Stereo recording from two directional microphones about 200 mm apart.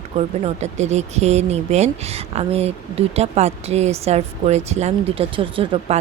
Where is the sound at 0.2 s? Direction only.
35° right (ahead or behind).